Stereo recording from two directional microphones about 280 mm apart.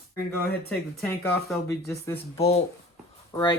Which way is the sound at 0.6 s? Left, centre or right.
Centre.